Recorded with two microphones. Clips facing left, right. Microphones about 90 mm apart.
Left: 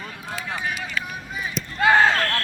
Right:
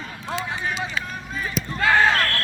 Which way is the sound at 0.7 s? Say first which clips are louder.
Right 2 dB; 25° right (ahead or behind).